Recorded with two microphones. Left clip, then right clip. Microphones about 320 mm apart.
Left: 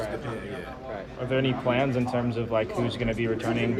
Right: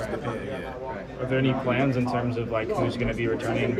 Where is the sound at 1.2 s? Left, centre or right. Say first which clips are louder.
Right 1 dB; left.